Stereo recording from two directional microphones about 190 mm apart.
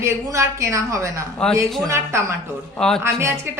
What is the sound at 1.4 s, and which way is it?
Speech, 5° left (ahead or behind).